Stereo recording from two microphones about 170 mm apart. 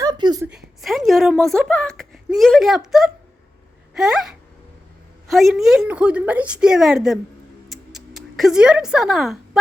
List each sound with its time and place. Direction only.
0.0 s a sound: 25° right (ahead or behind)
0.8 s a woman's voice: centre (ahead or behind)
5.3 s a woman's voice: centre (ahead or behind)
7.7 s music: centre (ahead or behind)